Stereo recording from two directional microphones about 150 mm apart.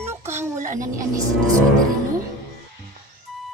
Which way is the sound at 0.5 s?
55° right (ahead or behind).